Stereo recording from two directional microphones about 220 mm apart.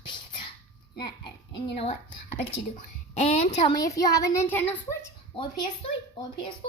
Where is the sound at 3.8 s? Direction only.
15° left (ahead or behind).